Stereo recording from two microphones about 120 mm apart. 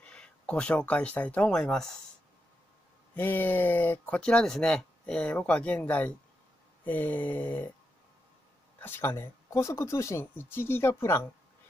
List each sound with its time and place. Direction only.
0.0 s speech: 10° left (ahead or behind)
3.2 s speech: 15° left (ahead or behind)
8.7 s speech: 20° left (ahead or behind)